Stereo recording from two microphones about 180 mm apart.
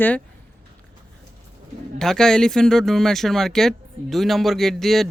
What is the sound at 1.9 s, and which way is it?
Speech, centre (ahead or behind).